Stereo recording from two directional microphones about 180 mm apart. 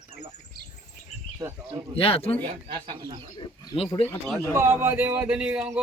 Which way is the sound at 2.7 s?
25° right (ahead or behind).